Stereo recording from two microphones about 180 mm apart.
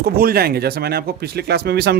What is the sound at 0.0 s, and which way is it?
A man's voice, 55° right (ahead or behind).